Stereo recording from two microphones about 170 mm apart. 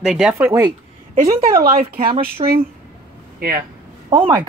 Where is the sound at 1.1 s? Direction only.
50° right (ahead or behind).